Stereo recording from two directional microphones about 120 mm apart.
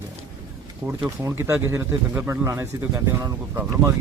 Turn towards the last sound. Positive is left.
turn(degrees=-25)  # may be behind; listen again after turning